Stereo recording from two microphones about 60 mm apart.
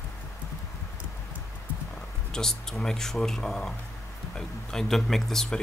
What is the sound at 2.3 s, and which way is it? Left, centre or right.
Speech, centre.